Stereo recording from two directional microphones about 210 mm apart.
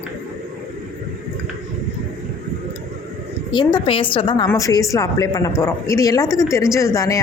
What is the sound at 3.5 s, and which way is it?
A woman's voice, 20° left (ahead or behind).